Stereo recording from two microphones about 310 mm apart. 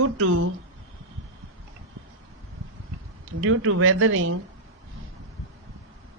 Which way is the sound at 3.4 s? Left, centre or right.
Right.